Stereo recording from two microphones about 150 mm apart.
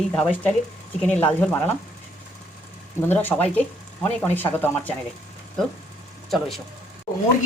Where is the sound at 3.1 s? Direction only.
15° left (ahead or behind).